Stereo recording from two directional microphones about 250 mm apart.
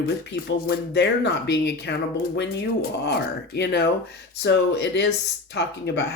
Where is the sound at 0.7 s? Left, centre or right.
Left.